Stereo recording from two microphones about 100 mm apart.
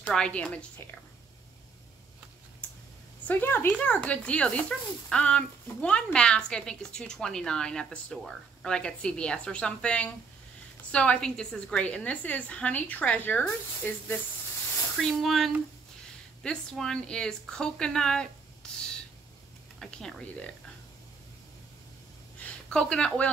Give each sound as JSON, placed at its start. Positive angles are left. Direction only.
{"t": 0.0, "sound": "speech", "side_deg": 10}
{"t": 3.3, "sound": "a woman's voice", "side_deg": 20}
{"t": 15.0, "sound": "speech", "side_deg": 0}
{"t": 22.4, "sound": "speech", "side_deg": 10}